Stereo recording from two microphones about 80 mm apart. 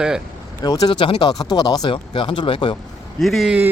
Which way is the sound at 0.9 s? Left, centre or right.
Left.